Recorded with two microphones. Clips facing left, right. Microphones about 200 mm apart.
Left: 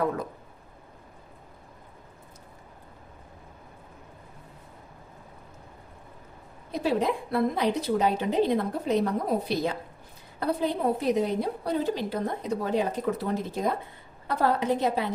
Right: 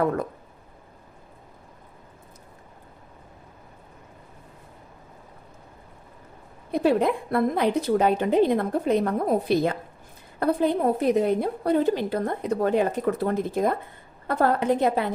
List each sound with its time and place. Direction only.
6.7 s a woman's voice: 55° right (ahead or behind)